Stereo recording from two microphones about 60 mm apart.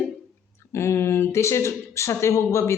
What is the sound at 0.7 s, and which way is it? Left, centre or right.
A man's voice, left.